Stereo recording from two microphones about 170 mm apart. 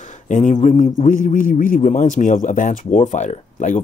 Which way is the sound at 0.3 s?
45° left (ahead or behind).